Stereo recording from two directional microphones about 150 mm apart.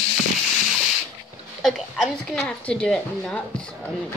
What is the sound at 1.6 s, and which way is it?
A woman's voice, centre (ahead or behind).